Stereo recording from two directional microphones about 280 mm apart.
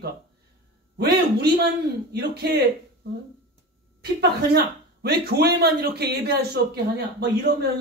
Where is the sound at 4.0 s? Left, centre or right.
Right.